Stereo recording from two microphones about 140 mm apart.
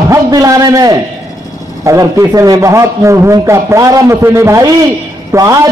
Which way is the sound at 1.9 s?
20° right (ahead or behind).